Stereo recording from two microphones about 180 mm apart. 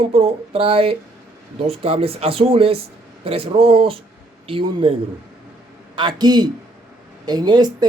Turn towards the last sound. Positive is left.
turn(degrees=-25)  # may be behind; listen again after turning